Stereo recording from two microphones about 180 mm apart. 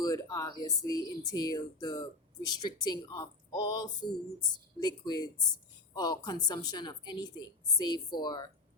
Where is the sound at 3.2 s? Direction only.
20° left (ahead or behind).